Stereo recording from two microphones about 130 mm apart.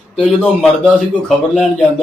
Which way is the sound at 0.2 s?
Centre (ahead or behind).